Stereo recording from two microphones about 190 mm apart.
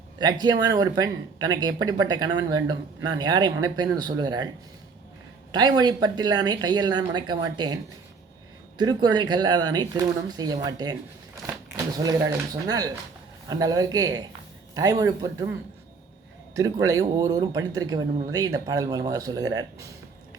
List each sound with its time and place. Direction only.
0.2 s speech: 20° right (ahead or behind)
5.5 s speech: 20° right (ahead or behind)
8.8 s speech: 20° right (ahead or behind)
16.6 s speech: 15° right (ahead or behind)